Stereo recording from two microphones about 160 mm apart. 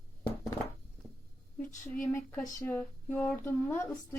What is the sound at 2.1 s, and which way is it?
A woman's voice, 10° left (ahead or behind).